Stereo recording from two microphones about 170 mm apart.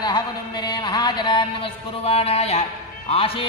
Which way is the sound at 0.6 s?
25° left (ahead or behind).